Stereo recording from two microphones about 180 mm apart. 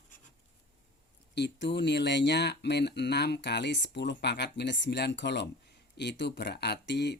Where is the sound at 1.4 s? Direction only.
70° left (ahead or behind).